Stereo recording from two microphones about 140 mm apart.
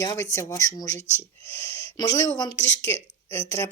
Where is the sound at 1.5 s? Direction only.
15° left (ahead or behind).